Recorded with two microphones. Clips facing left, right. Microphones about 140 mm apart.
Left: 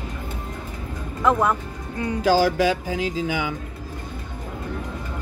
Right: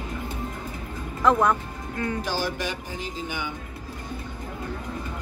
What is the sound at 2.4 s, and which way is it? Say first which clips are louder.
Speech: left 10 dB; 90° left.